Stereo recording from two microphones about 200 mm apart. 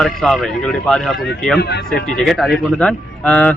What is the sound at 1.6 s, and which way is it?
Speech, 55° left (ahead or behind).